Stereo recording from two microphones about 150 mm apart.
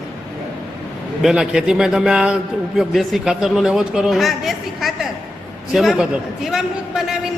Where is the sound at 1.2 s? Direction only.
5° right (ahead or behind).